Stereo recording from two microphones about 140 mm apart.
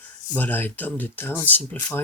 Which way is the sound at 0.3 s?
15° left (ahead or behind).